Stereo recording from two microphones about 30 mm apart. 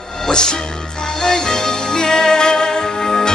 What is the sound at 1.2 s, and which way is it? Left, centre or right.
Music, centre.